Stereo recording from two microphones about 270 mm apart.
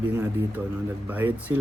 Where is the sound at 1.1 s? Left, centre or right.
Centre.